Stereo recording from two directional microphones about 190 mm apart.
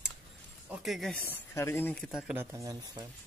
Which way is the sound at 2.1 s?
5° right (ahead or behind).